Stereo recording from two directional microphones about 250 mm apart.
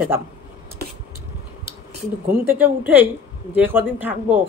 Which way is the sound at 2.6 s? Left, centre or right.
Centre.